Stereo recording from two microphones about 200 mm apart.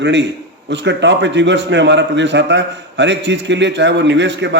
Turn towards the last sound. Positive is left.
turn(degrees=-60)  # may be behind; listen again after turning